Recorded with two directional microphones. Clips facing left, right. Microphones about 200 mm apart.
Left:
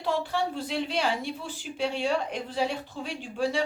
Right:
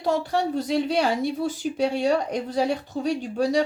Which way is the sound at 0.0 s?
45° right (ahead or behind).